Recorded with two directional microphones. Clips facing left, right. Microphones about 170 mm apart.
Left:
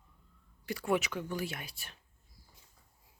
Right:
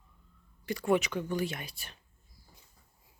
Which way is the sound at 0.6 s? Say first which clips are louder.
Right 4 dB; 5° left (ahead or behind).